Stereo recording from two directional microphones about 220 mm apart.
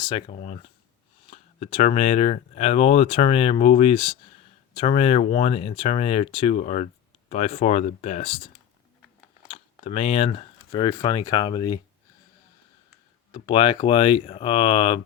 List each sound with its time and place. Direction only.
0.0 s speech: 20° left (ahead or behind)
9.5 s speech: 25° left (ahead or behind)
13.3 s speech: 25° left (ahead or behind)